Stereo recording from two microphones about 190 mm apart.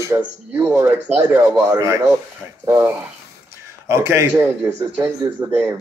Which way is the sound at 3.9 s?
15° right (ahead or behind).